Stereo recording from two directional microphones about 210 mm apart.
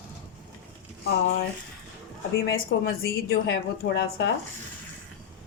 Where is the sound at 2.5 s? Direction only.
50° left (ahead or behind).